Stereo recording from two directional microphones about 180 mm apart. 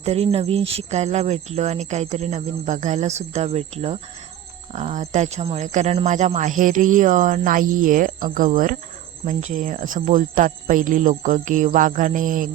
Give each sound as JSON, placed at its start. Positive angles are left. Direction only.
{"t": 0.0, "sound": "speech", "side_deg": -35}